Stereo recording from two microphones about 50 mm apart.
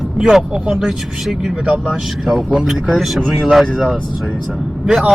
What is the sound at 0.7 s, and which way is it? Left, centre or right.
Speech, centre.